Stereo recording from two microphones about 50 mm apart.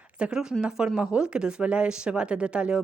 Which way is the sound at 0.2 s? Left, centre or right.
Centre.